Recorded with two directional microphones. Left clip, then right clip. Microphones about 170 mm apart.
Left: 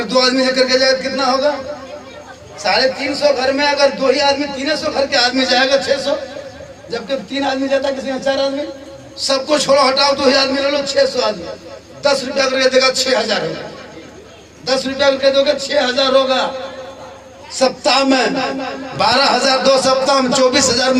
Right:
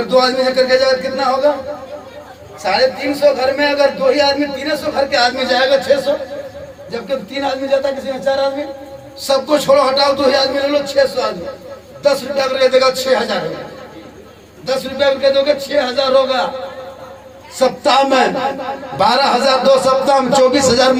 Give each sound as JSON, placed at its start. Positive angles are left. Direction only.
{"t": 0.1, "sound": "a man's voice", "side_deg": -45}
{"t": 2.6, "sound": "a man's voice", "side_deg": -45}
{"t": 14.7, "sound": "a man's voice", "side_deg": -45}
{"t": 17.5, "sound": "a man's voice", "side_deg": -45}